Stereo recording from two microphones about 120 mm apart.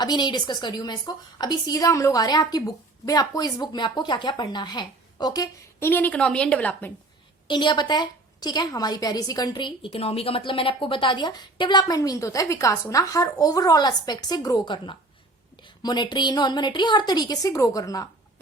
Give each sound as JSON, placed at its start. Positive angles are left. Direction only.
{"t": 0.0, "sound": "a woman's voice", "side_deg": 35}
{"t": 5.8, "sound": "a woman's voice", "side_deg": 15}
{"t": 7.4, "sound": "a woman's voice", "side_deg": 40}